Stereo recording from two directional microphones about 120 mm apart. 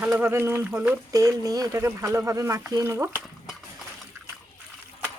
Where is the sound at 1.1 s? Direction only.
30° right (ahead or behind).